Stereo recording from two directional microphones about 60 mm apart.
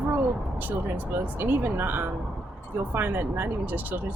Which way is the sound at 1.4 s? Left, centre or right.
Right.